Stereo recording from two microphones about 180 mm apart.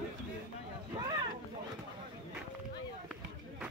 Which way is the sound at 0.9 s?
25° right (ahead or behind).